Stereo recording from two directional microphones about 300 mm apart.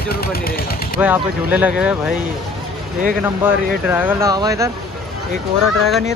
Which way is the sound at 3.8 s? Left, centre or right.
Centre.